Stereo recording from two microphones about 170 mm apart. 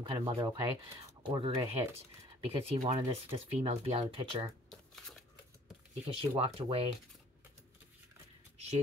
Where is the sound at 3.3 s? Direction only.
35° right (ahead or behind).